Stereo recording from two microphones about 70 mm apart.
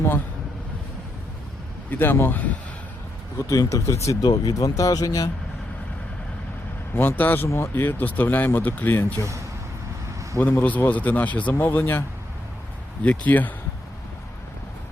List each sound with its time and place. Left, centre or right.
1.9 s a man's voice: left
3.3 s speech: left
4.2 s speech: left
4.5 s speech: left
6.9 s a man's voice: left
7.4 s speech: left
10.4 s a man's voice: left